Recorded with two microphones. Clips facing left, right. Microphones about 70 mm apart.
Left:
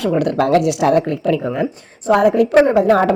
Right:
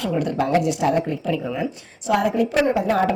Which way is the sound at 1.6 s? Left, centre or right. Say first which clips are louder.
Left 6 dB; left.